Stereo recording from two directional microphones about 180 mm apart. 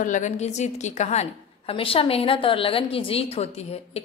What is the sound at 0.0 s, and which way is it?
A woman's voice, 45° left (ahead or behind).